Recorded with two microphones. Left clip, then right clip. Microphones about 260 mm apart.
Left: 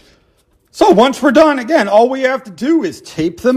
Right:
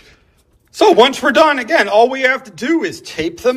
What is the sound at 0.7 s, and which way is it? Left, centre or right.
A man's voice, centre.